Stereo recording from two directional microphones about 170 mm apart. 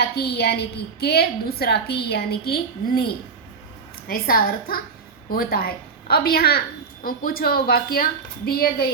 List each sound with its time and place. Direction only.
0.0 s a woman's voice: 70° left (ahead or behind)
4.1 s a woman's voice: 60° left (ahead or behind)